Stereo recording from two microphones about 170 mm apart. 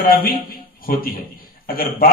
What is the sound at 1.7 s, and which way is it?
Speech, 60° left (ahead or behind).